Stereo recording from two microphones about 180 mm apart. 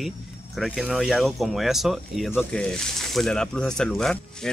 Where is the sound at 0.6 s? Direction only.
Centre (ahead or behind).